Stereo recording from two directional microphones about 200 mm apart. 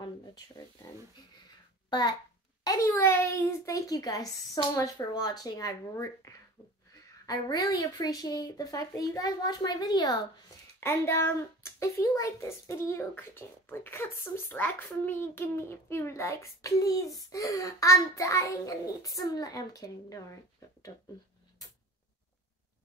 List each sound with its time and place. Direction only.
1.9 s a child's voice: 20° left (ahead or behind)